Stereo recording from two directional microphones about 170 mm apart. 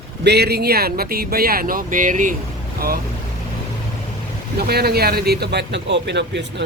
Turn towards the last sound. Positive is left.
turn(degrees=-90)